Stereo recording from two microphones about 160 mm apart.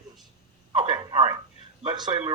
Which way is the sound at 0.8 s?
30° right (ahead or behind).